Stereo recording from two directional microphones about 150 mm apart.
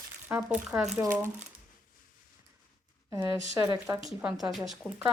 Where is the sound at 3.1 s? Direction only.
25° right (ahead or behind).